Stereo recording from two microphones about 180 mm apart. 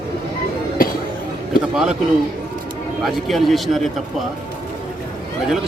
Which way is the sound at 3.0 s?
Centre (ahead or behind).